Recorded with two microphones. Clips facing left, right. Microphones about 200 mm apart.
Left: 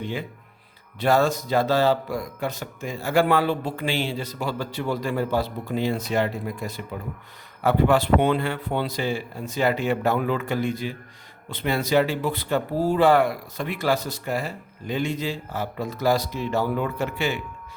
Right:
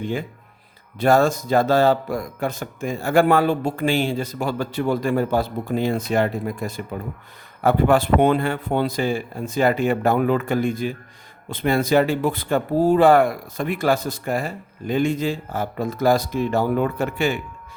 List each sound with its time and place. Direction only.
0.0 s speech: 50° right (ahead or behind)